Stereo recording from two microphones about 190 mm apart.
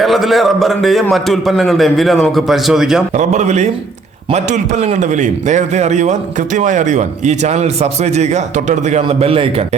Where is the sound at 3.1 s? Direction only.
35° right (ahead or behind).